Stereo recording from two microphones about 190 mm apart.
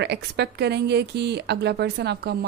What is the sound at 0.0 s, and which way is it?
Speech, 60° right (ahead or behind).